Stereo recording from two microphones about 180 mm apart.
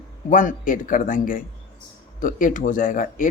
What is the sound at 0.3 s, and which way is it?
Speech, 45° left (ahead or behind).